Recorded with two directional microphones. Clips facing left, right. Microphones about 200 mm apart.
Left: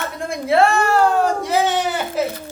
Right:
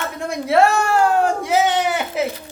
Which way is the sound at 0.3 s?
Centre (ahead or behind).